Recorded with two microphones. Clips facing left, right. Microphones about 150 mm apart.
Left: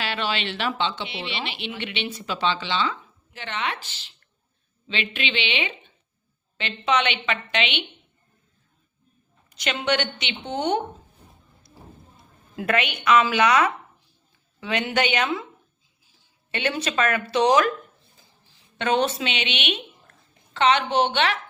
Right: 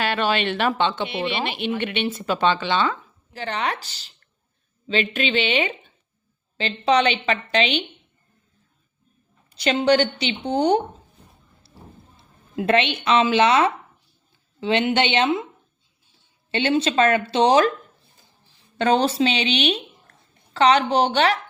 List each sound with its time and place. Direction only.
0.0 s speech: 50° right (ahead or behind)
3.3 s a woman's voice: 35° right (ahead or behind)
9.5 s a woman's voice: 30° right (ahead or behind)
11.6 s a sound: 30° right (ahead or behind)
12.1 s speech: 25° right (ahead or behind)
16.5 s speech: 30° right (ahead or behind)
18.8 s a woman's voice: 35° right (ahead or behind)